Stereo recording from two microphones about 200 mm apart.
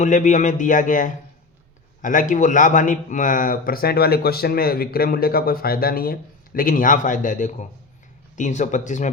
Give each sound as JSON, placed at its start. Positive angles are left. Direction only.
{"t": 0.0, "sound": "a man's voice", "side_deg": 40}